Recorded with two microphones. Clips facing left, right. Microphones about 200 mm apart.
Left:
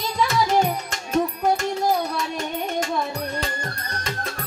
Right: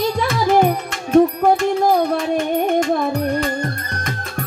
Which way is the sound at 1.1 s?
55° right (ahead or behind).